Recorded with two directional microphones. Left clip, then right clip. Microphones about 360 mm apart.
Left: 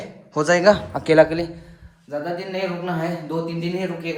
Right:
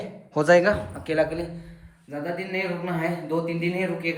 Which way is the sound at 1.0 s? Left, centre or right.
Centre.